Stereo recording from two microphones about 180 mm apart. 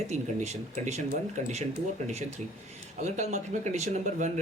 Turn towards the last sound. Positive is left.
turn(degrees=-40)  # may be behind; listen again after turning